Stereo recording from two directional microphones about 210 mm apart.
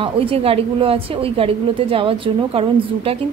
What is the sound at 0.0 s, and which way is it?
A woman's voice, 25° right (ahead or behind).